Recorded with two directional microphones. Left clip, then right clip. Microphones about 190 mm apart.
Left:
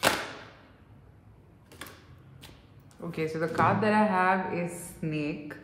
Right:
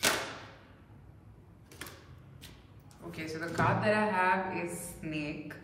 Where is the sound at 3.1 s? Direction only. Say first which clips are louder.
Left 7 dB; 30° left (ahead or behind).